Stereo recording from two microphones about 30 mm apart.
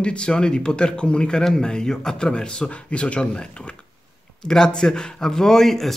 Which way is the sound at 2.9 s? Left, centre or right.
Left.